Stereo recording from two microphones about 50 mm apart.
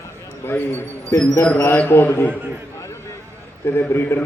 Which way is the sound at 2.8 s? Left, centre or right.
Left.